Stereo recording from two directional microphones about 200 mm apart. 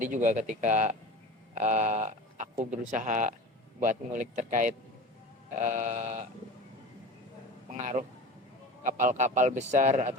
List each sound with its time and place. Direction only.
0.0 s speech: 40° right (ahead or behind)
7.7 s speech: 40° right (ahead or behind)